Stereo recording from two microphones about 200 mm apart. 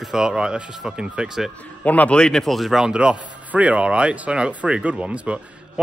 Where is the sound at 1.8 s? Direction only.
5° left (ahead or behind).